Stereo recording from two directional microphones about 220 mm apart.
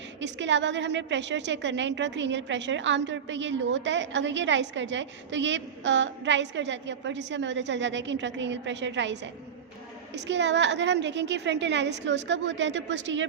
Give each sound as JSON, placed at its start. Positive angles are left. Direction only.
{"t": 0.2, "sound": "a woman's voice", "side_deg": -55}
{"t": 10.2, "sound": "a woman's voice", "side_deg": -55}